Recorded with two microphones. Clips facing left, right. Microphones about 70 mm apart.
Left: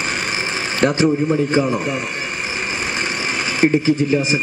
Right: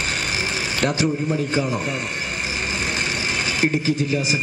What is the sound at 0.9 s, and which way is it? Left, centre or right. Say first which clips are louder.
Speech: left 5 dB; left.